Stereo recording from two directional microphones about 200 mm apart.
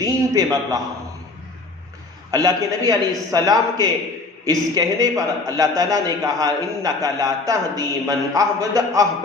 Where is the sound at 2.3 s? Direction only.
20° right (ahead or behind).